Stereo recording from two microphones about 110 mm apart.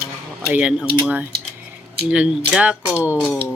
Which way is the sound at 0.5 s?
5° right (ahead or behind).